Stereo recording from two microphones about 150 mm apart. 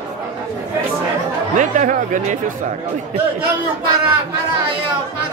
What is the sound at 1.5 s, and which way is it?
Speech, 55° right (ahead or behind).